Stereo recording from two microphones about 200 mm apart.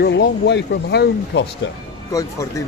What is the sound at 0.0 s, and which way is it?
Speech, 60° left (ahead or behind).